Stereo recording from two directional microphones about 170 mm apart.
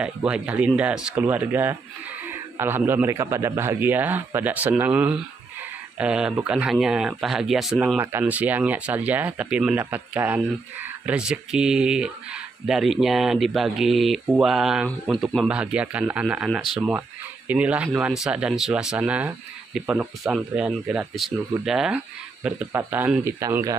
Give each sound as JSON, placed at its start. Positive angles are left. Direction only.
{"t": 0.0, "sound": "speech", "side_deg": -5}
{"t": 8.0, "sound": "speech", "side_deg": -10}